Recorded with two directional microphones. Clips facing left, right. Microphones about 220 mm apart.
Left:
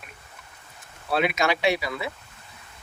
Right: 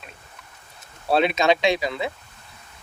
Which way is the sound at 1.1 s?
25° right (ahead or behind).